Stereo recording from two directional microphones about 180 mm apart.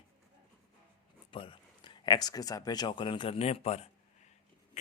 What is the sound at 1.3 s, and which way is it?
Speech, 30° left (ahead or behind).